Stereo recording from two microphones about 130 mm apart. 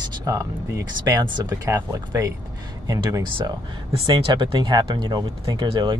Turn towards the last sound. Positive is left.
turn(degrees=-35)  # may be behind; listen again after turning